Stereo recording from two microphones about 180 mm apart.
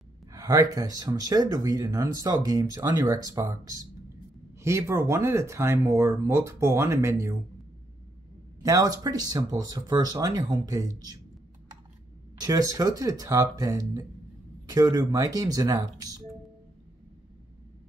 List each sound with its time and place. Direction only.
0.3 s speech: 20° right (ahead or behind)
8.6 s speech: 20° right (ahead or behind)
12.4 s speech: 20° right (ahead or behind)